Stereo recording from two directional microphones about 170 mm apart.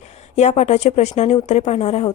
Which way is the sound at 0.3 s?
40° left (ahead or behind).